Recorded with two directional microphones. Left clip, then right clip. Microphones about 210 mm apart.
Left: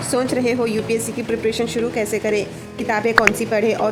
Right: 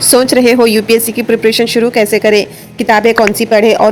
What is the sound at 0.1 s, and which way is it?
A woman's voice, 35° right (ahead or behind).